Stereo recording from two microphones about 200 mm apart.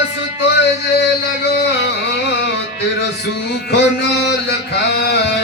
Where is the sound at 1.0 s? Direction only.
60° left (ahead or behind).